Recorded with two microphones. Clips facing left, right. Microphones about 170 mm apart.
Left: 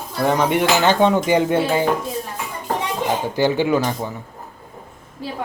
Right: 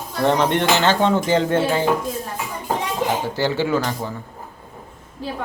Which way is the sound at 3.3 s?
15° left (ahead or behind).